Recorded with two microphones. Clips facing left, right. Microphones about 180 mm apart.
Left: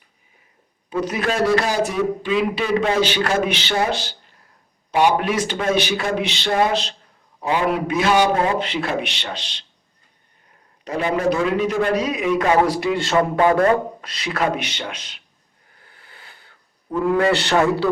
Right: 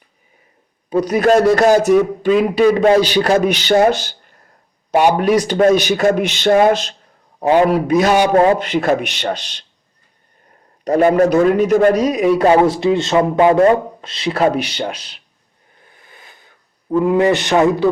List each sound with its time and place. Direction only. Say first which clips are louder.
0.9 s a man's voice: right 9 dB; 40° right (ahead or behind)
10.8 s a man's voice: right 8 dB; 50° right (ahead or behind)
15.8 s a sound: right 3 dB; 20° right (ahead or behind)
17.0 s a man's voice: right 4 dB; 20° right (ahead or behind)